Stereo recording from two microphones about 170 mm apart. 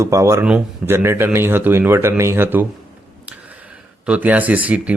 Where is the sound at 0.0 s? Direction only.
20° right (ahead or behind).